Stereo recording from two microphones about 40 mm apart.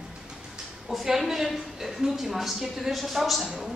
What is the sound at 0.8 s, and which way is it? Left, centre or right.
A woman's voice, centre.